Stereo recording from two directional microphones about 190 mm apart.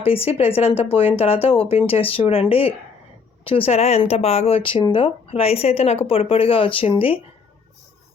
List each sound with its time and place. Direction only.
0.0 s speech: 30° left (ahead or behind)